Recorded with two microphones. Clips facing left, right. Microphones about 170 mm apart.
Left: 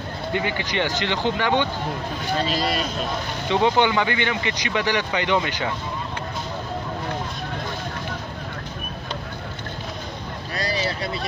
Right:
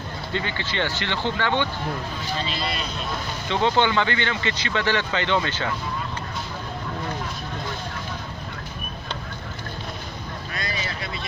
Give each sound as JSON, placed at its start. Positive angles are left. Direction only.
{"t": 0.3, "sound": "speech", "side_deg": 15}
{"t": 2.3, "sound": "speech", "side_deg": 45}
{"t": 3.4, "sound": "speech", "side_deg": 15}
{"t": 10.5, "sound": "vehicle", "side_deg": 35}